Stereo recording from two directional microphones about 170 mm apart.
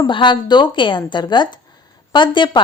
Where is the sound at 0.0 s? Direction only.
25° left (ahead or behind).